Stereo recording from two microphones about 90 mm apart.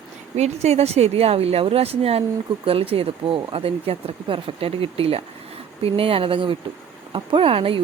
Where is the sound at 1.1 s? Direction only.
90° right.